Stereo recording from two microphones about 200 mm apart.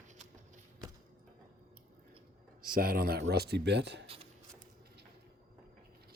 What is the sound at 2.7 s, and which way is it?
Speech, 45° right (ahead or behind).